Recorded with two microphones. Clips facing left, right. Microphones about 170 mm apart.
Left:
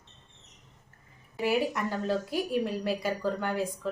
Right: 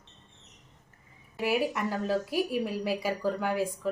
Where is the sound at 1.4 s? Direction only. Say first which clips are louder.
Even; 5° right (ahead or behind).